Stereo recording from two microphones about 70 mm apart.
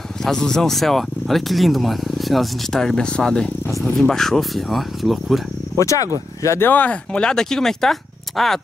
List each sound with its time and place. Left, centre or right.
0.2 s speech: centre
5.8 s speech: left
6.6 s speech: left; by 8.5 s centre